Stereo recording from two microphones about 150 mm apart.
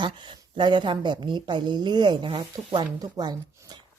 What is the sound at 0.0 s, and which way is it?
Speech, 30° right (ahead or behind).